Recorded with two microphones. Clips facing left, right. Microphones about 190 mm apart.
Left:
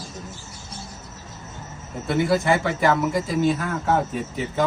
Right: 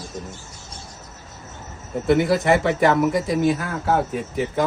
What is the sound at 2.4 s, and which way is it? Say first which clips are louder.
Speech: right 3 dB; 65° right (ahead or behind).